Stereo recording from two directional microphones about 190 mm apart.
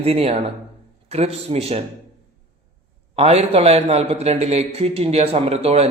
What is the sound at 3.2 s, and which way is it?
A man's voice, 35° right (ahead or behind).